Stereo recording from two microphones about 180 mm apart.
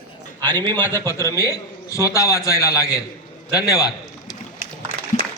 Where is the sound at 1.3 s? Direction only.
15° left (ahead or behind).